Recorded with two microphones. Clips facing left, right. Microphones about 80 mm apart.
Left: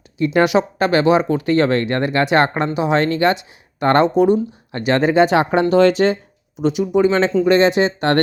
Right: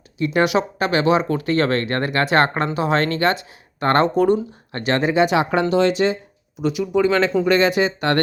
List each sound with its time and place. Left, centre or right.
0.3 s speech: left
5.0 s speech: left
6.6 s speech: left
6.8 s speech: centre